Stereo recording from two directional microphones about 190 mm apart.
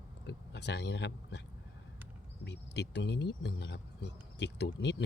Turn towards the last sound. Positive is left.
turn(degrees=65)  # may be behind; listen again after turning